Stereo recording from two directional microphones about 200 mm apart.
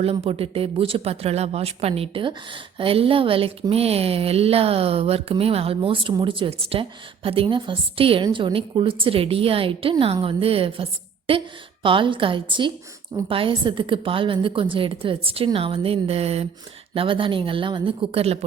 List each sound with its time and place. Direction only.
0.0 s speech: 30° right (ahead or behind)